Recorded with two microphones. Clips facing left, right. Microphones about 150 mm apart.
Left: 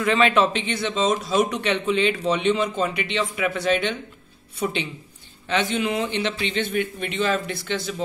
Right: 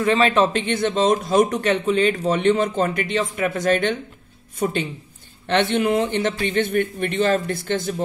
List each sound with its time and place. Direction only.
0.0 s speech: 35° right (ahead or behind)
0.5 s a man's voice: 50° right (ahead or behind)
5.5 s a man's voice: 60° right (ahead or behind)